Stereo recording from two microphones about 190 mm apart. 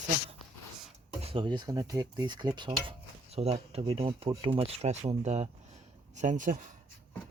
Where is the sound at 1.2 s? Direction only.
30° right (ahead or behind).